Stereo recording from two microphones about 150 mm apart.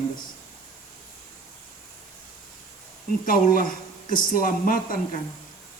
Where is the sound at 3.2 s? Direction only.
70° left (ahead or behind).